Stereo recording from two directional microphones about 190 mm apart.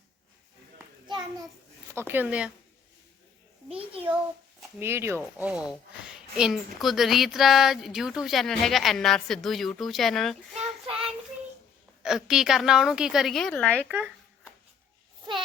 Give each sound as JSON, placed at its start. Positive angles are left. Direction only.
{"t": 1.0, "sound": "a sound", "side_deg": -20}
{"t": 1.9, "sound": "speech", "side_deg": -10}
{"t": 4.8, "sound": "speech", "side_deg": -15}
{"t": 10.5, "sound": "child singing", "side_deg": -30}
{"t": 12.0, "sound": "speech", "side_deg": 0}
{"t": 13.8, "sound": "speech", "side_deg": -5}